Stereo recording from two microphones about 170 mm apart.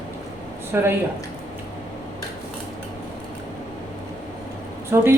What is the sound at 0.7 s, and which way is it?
Speech, 10° right (ahead or behind).